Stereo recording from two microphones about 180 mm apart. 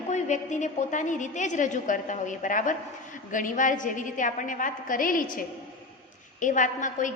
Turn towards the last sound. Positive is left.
turn(degrees=45)  # may be behind; listen again after turning